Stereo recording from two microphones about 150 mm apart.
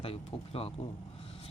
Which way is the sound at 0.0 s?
40° left (ahead or behind).